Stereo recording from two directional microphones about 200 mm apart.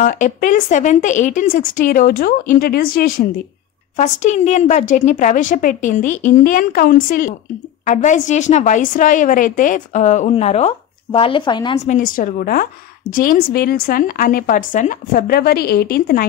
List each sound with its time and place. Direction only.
0.0 s a woman's voice: 40° left (ahead or behind)
3.9 s a woman's voice: 35° left (ahead or behind)
11.8 s a woman's voice: 40° left (ahead or behind)